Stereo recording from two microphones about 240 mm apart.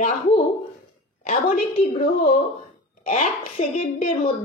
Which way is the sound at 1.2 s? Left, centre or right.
Left.